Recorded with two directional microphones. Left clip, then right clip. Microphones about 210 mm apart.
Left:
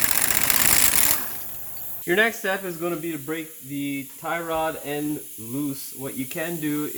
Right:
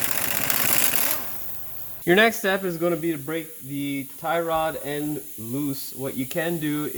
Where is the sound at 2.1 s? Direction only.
50° right (ahead or behind).